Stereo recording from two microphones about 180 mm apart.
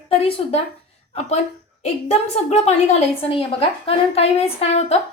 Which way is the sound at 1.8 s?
35° left (ahead or behind).